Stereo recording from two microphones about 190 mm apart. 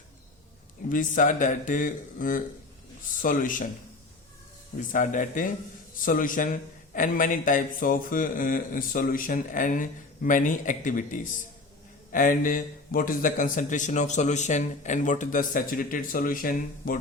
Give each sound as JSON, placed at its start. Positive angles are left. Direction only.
{"t": 0.9, "sound": "a man's voice", "side_deg": 45}
{"t": 4.8, "sound": "a man's voice", "side_deg": 45}